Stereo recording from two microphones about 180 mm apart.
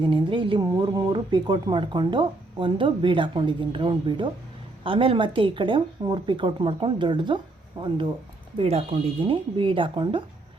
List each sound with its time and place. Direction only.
0.0 s speech: 25° right (ahead or behind)